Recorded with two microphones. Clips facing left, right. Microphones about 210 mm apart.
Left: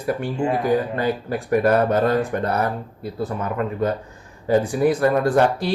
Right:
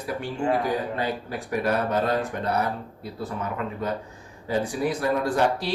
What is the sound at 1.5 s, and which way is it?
Speech, 50° left (ahead or behind).